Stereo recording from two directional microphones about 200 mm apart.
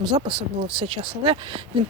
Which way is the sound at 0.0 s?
20° right (ahead or behind).